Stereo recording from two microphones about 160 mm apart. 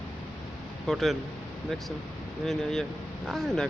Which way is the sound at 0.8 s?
Centre (ahead or behind).